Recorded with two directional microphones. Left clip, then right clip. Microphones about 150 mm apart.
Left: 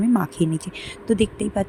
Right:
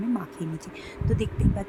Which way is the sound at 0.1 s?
50° left (ahead or behind).